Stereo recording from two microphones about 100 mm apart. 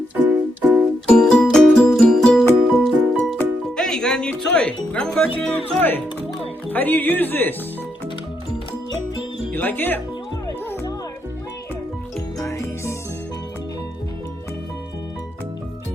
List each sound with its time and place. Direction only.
0.2 s music: 15° right (ahead or behind)
1.0 s music: 5° left (ahead or behind)
5.4 s speech: 10° left (ahead or behind)
9.6 s speech: 20° left (ahead or behind)
12.4 s music: 30° left (ahead or behind)